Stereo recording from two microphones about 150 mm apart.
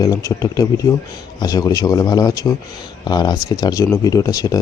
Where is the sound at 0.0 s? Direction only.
20° left (ahead or behind).